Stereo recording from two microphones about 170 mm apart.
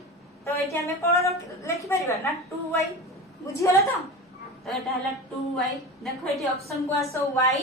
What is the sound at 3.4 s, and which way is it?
Speech, 20° left (ahead or behind).